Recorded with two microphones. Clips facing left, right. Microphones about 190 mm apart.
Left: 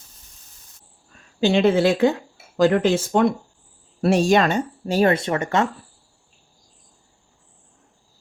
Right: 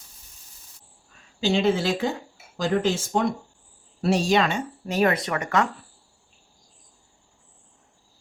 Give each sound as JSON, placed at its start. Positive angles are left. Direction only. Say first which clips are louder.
{"t": 1.4, "sound": "speech", "louder": "left 5 dB", "side_deg": 60}